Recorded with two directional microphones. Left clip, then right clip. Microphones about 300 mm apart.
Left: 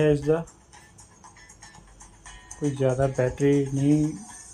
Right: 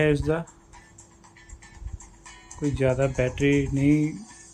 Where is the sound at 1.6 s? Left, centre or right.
Centre.